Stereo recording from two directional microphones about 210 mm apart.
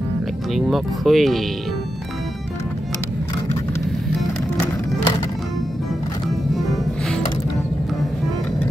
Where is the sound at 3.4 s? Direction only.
15° left (ahead or behind).